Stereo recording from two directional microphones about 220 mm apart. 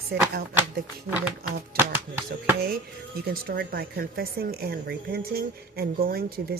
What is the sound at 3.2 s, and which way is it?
Speech, 45° right (ahead or behind).